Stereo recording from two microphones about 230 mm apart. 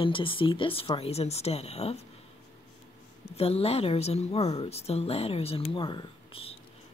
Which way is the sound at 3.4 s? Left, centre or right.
Left.